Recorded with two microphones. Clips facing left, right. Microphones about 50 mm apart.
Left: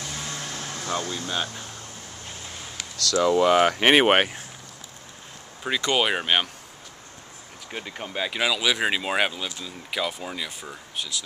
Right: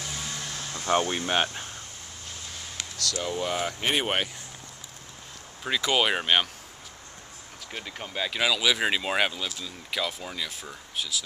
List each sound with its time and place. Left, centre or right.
0.1 s vehicle: centre
0.8 s speech: right
3.0 s speech: left
5.8 s speech: centre
7.7 s speech: centre
11.0 s speech: centre